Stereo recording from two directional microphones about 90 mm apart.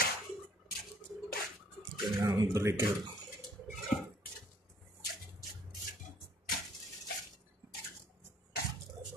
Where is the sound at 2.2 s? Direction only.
40° right (ahead or behind).